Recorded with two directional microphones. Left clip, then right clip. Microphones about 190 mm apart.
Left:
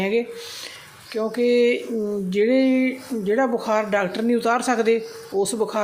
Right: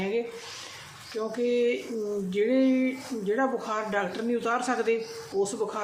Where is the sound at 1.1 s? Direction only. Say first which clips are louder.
Left 8 dB; 35° left (ahead or behind).